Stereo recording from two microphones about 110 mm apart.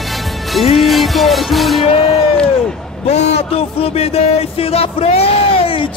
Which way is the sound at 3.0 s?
85° left.